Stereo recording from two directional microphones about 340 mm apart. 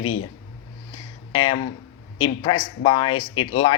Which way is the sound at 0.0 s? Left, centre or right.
Left.